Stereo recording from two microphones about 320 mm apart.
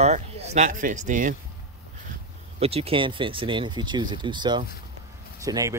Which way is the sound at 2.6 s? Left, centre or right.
Centre.